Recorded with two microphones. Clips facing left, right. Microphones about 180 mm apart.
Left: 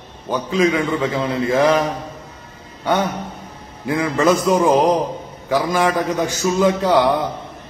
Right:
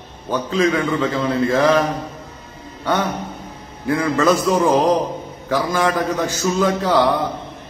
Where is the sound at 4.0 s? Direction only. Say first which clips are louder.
Left 1 dB; 15° left (ahead or behind).